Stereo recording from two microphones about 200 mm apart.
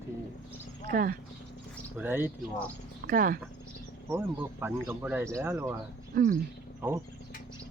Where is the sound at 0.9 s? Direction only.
45° right (ahead or behind).